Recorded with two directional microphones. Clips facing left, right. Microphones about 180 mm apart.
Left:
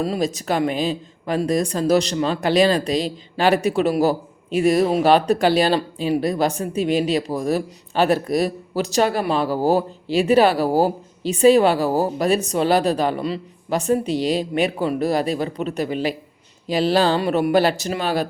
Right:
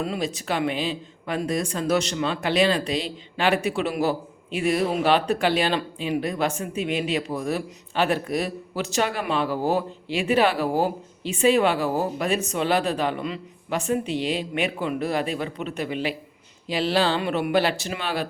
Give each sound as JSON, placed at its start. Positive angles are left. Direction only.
{"t": 0.0, "sound": "speech", "side_deg": 35}